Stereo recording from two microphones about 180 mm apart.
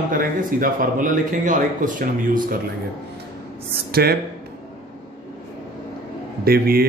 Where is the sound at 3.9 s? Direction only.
60° right (ahead or behind).